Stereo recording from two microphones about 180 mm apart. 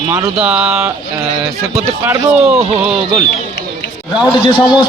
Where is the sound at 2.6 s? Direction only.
35° right (ahead or behind).